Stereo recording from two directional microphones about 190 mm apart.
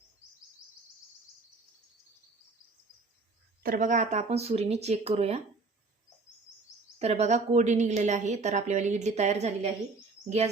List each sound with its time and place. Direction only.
3.6 s a woman's voice: 45° right (ahead or behind)
7.0 s a woman's voice: 35° right (ahead or behind)